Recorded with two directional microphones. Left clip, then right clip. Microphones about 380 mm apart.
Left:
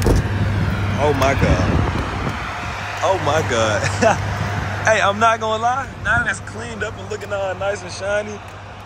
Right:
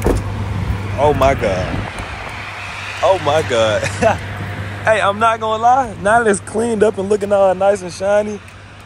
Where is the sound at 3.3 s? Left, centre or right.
Centre.